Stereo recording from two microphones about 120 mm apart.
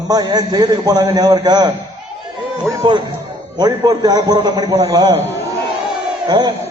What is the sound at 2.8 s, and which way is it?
A man's voice, 40° right (ahead or behind).